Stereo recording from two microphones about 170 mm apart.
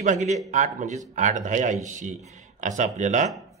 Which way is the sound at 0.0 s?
45° right (ahead or behind).